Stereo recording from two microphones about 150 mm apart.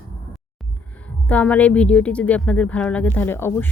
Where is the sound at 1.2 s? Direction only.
10° left (ahead or behind).